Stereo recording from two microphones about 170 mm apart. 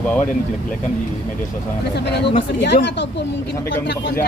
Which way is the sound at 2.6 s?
85° left.